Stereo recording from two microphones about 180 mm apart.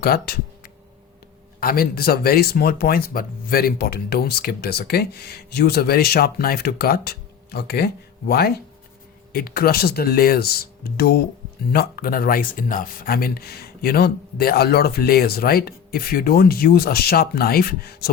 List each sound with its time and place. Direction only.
0.0 s speech: 60° left (ahead or behind)